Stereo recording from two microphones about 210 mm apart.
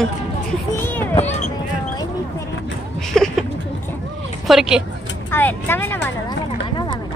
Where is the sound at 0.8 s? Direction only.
10° left (ahead or behind).